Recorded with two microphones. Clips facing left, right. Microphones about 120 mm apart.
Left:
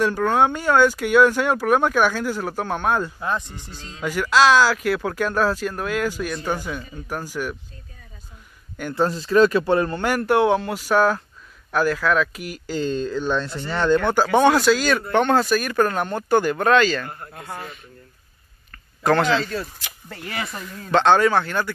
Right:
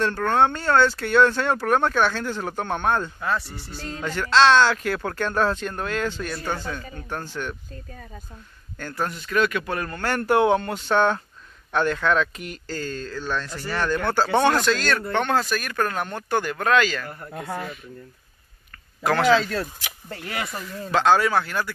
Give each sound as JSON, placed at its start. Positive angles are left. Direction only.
{"t": 0.0, "sound": "speech", "side_deg": 10}
{"t": 3.2, "sound": "speech", "side_deg": 20}
{"t": 8.9, "sound": "speech", "side_deg": 30}
{"t": 10.0, "sound": "speech", "side_deg": 5}
{"t": 12.7, "sound": "speech", "side_deg": 20}
{"t": 16.8, "sound": "speech", "side_deg": -10}
{"t": 19.0, "sound": "speech", "side_deg": -5}